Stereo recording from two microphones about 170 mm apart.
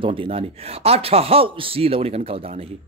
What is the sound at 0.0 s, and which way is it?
Speech, 30° right (ahead or behind).